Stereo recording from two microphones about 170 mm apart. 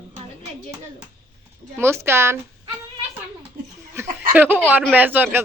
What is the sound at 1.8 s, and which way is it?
Speech, 15° right (ahead or behind).